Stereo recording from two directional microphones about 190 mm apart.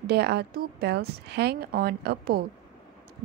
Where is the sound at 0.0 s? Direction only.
60° right (ahead or behind).